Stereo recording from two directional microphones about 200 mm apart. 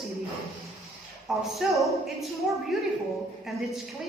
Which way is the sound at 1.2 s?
Centre (ahead or behind).